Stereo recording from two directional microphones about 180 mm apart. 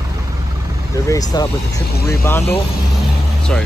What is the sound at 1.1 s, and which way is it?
Speech, 20° left (ahead or behind).